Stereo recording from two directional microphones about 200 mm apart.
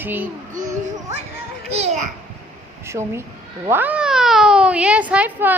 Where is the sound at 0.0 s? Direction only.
10° right (ahead or behind).